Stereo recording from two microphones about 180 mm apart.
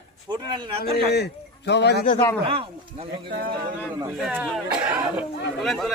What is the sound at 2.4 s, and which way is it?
Speech, 30° right (ahead or behind).